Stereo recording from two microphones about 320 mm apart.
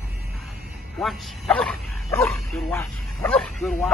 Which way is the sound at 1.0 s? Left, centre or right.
Centre.